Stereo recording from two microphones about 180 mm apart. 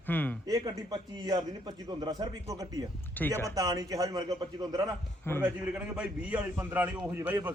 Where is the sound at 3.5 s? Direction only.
20° right (ahead or behind).